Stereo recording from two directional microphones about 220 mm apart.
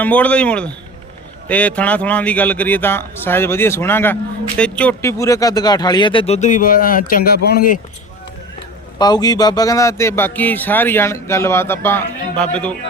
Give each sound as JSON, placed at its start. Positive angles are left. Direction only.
{"t": 0.0, "sound": "speech", "side_deg": 5}
{"t": 9.0, "sound": "speech", "side_deg": 20}